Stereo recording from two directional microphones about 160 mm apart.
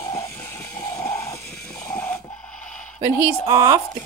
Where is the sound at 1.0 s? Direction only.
15° left (ahead or behind).